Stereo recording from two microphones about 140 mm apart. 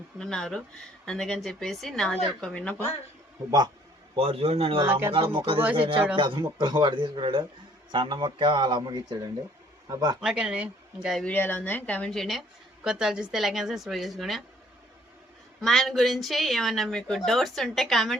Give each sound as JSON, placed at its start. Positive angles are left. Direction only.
{"t": 0.2, "sound": "speech", "side_deg": 5}
{"t": 4.1, "sound": "a man's voice", "side_deg": -45}
{"t": 4.8, "sound": "speech", "side_deg": -20}
{"t": 5.1, "sound": "speech", "side_deg": -35}
{"t": 10.2, "sound": "speech", "side_deg": -5}
{"t": 11.3, "sound": "speech", "side_deg": 15}
{"t": 15.6, "sound": "speech", "side_deg": 0}